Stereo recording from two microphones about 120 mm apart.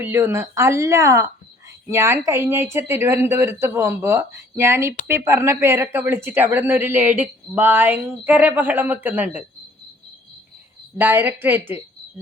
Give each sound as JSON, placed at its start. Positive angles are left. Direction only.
{"t": 0.0, "sound": "speech", "side_deg": -15}
{"t": 10.9, "sound": "speech", "side_deg": -15}